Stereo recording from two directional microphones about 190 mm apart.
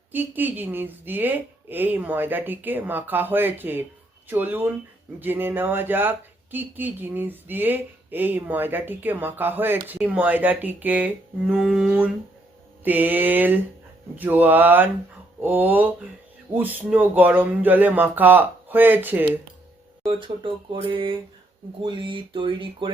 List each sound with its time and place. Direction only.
0.1 s speech: 10° right (ahead or behind)
11.5 s a sound: centre (ahead or behind)
12.8 s speech: 10° right (ahead or behind)
20.1 s speech: 25° right (ahead or behind)